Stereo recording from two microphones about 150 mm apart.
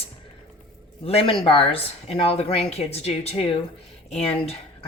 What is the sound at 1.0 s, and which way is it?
Speech, 40° left (ahead or behind).